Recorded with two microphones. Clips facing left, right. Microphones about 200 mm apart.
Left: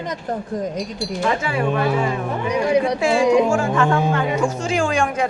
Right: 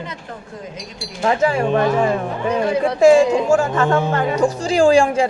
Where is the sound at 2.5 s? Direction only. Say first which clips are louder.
Even; 15° left (ahead or behind).